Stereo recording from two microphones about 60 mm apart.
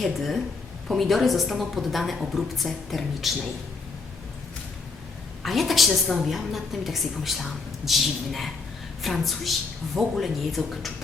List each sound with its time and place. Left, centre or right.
0.0 s a woman's voice: centre
5.4 s a woman's voice: centre